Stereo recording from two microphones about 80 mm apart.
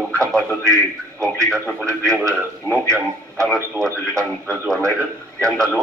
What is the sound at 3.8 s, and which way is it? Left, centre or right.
Speech, right.